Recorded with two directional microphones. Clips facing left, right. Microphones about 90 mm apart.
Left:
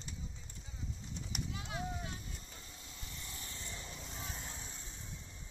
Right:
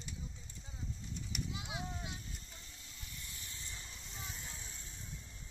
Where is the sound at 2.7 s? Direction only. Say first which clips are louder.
Left 3 dB; 30° left (ahead or behind).